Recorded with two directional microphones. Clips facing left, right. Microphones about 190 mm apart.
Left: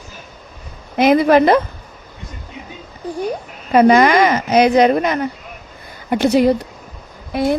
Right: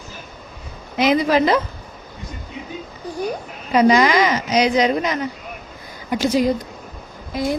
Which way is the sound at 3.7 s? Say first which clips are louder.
Left 4 dB; 55° left (ahead or behind).